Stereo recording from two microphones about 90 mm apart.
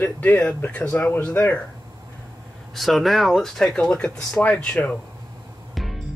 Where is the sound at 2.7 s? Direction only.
Centre (ahead or behind).